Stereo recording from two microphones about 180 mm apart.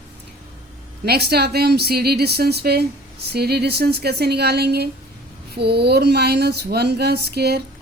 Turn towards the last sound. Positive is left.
turn(degrees=-65)  # may be behind; listen again after turning